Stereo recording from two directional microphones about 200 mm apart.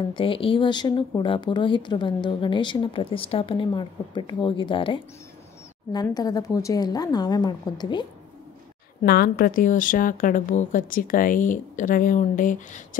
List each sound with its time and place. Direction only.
0.1 s speech: 25° left (ahead or behind)
9.0 s a woman's voice: 50° left (ahead or behind)